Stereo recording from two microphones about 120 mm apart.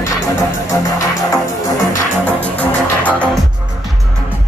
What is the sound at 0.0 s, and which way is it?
Music, 25° left (ahead or behind).